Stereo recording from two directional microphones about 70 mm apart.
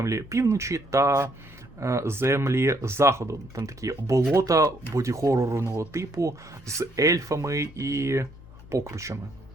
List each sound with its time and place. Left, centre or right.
0.0 s speech: right